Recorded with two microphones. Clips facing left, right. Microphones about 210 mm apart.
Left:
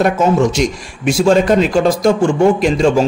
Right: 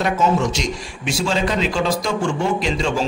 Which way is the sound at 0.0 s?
50° left (ahead or behind).